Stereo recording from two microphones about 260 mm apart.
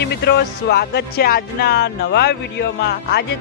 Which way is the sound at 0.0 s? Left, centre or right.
Left.